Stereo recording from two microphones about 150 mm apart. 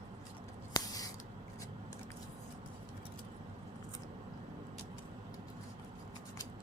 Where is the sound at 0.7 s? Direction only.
25° left (ahead or behind).